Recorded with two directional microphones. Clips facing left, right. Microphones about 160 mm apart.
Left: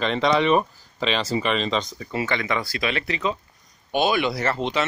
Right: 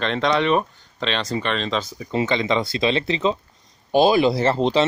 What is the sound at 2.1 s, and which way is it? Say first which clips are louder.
Speech: right 5 dB; 20° right (ahead or behind).